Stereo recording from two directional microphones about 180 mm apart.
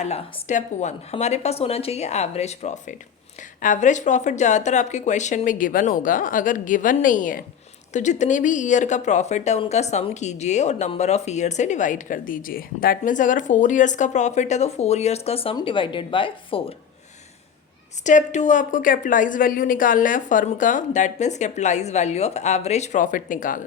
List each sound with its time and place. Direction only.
0.0 s speech: 40° left (ahead or behind)
18.0 s speech: 40° left (ahead or behind)